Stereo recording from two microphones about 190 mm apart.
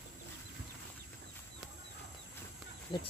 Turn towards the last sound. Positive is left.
turn(degrees=25)  # may be behind; listen again after turning